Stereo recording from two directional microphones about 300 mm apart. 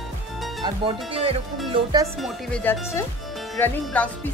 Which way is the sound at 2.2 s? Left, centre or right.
Centre.